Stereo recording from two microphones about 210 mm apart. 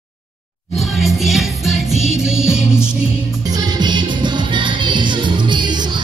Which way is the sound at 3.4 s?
20° right (ahead or behind).